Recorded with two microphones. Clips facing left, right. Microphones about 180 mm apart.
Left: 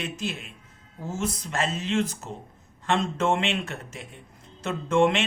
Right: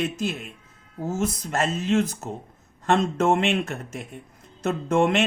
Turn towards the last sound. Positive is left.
turn(degrees=-45)  # may be behind; listen again after turning